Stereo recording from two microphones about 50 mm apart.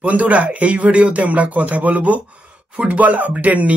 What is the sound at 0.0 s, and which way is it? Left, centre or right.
Speech, right.